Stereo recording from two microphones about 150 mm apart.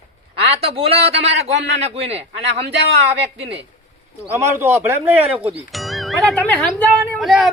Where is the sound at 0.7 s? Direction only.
40° right (ahead or behind).